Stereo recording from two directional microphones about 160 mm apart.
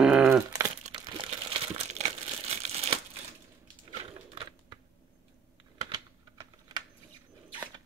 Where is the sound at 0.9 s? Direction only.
35° right (ahead or behind).